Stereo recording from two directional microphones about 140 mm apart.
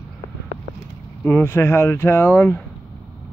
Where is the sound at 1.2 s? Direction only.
15° left (ahead or behind).